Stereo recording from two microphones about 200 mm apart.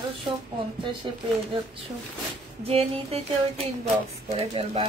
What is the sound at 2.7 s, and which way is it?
Speech, 30° right (ahead or behind).